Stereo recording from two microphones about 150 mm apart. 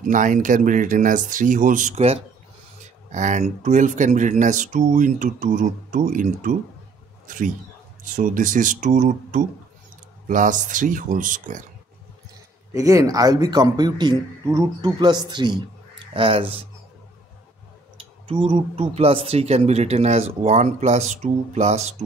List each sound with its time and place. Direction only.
0.0 s speech: 60° right (ahead or behind)
12.7 s a man's voice: 20° right (ahead or behind); by 16.5 s 40° right (ahead or behind)
17.9 s speech: 40° right (ahead or behind)